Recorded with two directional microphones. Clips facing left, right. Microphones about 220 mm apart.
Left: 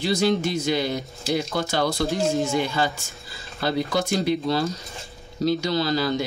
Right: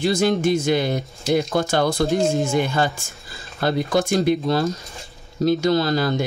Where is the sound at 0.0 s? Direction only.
50° right (ahead or behind).